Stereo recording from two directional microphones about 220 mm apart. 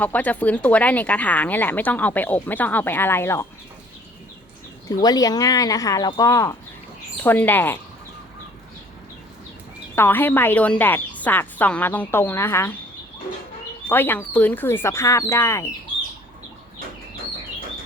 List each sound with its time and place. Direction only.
0.0 s speech: 5° left (ahead or behind)
4.9 s speech: 15° left (ahead or behind)
9.9 s speech: 10° left (ahead or behind)
13.8 s speech: 10° left (ahead or behind)